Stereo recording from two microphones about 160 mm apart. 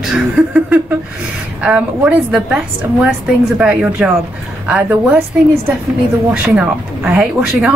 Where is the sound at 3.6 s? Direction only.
5° right (ahead or behind).